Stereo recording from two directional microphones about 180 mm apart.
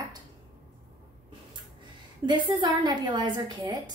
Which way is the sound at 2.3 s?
25° right (ahead or behind).